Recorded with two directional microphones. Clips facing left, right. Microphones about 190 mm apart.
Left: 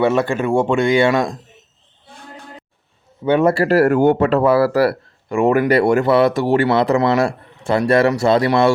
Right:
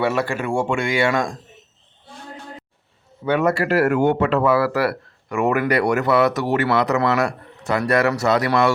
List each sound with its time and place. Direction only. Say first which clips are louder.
0.0 s speech: left 5 dB; 25° left (ahead or behind)
3.2 s speech: left 4 dB; 30° left (ahead or behind)